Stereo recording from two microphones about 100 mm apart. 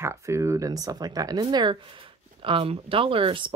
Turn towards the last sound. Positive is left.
turn(degrees=-55)  # may be behind; listen again after turning